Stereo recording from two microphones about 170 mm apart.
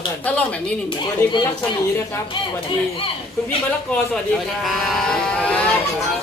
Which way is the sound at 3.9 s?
Centre (ahead or behind).